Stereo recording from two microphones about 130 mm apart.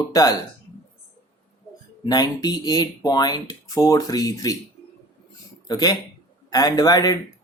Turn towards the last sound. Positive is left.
turn(degrees=30)  # may be behind; listen again after turning